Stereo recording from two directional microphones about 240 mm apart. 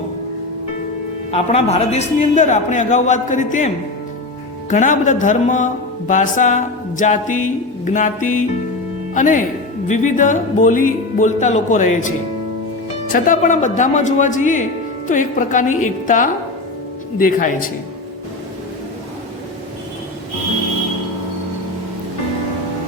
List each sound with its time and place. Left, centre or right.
1.3 s a man's voice: left
4.7 s a man's voice: left
13.1 s a man's voice: left